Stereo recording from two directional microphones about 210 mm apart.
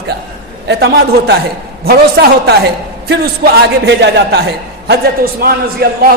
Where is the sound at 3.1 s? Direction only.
55° right (ahead or behind).